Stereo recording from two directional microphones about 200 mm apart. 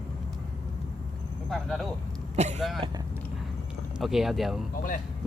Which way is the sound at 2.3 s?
35° right (ahead or behind).